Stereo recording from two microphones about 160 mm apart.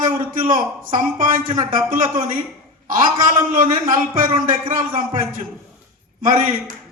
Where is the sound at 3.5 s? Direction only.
55° right (ahead or behind).